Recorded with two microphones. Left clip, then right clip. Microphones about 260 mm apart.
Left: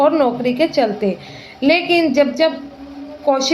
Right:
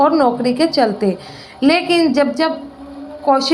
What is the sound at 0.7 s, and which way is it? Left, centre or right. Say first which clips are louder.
Speech: right 1 dB; right.